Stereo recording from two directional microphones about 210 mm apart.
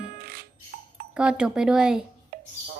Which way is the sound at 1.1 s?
5° right (ahead or behind).